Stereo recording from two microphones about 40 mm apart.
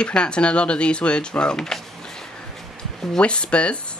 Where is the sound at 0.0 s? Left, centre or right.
Left.